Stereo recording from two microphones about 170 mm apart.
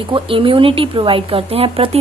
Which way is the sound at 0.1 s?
30° right (ahead or behind).